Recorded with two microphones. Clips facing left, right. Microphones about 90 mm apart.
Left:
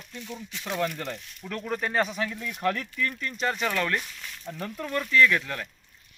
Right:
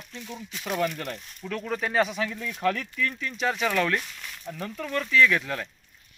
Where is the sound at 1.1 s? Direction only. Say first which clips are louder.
Right 2 dB; 5° left (ahead or behind).